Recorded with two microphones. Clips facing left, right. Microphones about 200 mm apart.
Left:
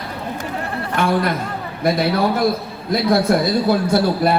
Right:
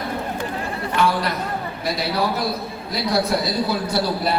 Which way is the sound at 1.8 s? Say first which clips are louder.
Left 6 dB; 50° left (ahead or behind).